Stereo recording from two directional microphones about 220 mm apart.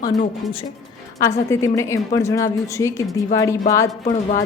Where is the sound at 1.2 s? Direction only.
15° left (ahead or behind).